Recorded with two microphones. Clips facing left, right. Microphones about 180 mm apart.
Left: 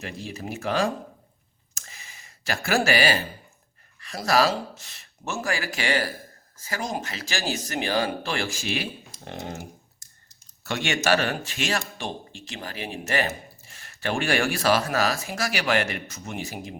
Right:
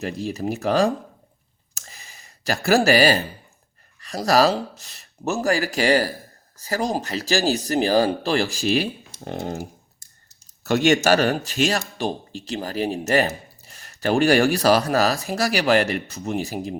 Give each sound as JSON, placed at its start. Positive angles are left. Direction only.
{"t": 0.0, "sound": "speech", "side_deg": -40}
{"t": 1.7, "sound": "clicking", "side_deg": -35}
{"t": 4.0, "sound": "speech", "side_deg": -35}